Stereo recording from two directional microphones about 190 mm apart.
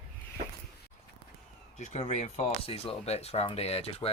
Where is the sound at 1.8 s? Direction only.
40° left (ahead or behind).